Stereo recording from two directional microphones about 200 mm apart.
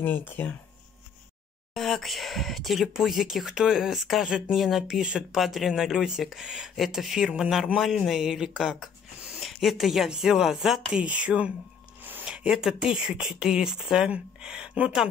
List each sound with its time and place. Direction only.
0.0 s speech: 10° left (ahead or behind)
1.7 s speech: centre (ahead or behind)